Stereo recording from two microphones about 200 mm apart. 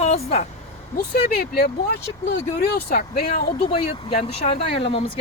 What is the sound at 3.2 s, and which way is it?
Speech, 35° left (ahead or behind).